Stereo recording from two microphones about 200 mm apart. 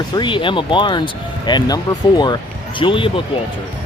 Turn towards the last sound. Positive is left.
turn(degrees=25)  # may be behind; listen again after turning